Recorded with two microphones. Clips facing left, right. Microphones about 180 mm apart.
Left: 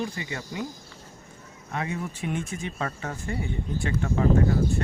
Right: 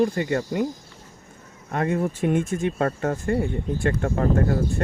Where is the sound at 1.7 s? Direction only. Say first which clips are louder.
Right 8 dB; 50° right (ahead or behind).